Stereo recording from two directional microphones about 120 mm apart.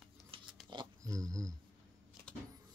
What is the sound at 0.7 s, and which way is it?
Pig, 35° right (ahead or behind).